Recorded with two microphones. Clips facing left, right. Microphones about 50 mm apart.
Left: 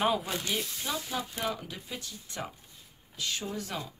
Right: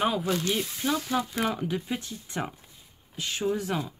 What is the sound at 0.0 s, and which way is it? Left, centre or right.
Speech, centre.